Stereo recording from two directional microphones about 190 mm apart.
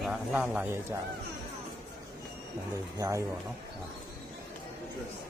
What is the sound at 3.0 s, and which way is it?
Speech, 15° right (ahead or behind).